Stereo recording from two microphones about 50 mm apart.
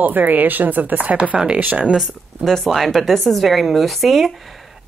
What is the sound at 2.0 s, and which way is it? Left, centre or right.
Speech, centre.